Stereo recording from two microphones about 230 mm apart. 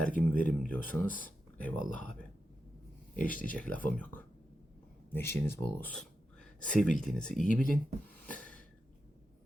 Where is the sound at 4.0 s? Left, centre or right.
Centre.